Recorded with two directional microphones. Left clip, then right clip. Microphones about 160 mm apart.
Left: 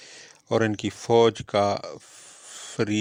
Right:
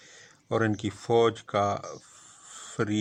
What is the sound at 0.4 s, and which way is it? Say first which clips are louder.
A man's voice: left 4 dB; 30° left (ahead or behind).